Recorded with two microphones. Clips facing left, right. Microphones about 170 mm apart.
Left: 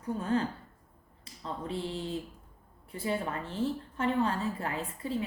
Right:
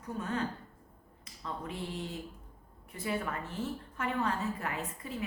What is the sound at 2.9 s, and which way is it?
A woman's voice, 30° left (ahead or behind).